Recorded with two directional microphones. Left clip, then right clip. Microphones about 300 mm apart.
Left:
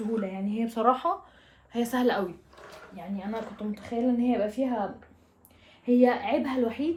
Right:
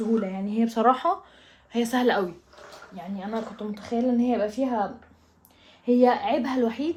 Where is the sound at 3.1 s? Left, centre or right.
Right.